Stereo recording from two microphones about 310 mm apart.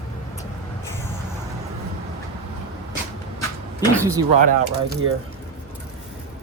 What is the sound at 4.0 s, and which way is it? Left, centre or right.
Speech, centre.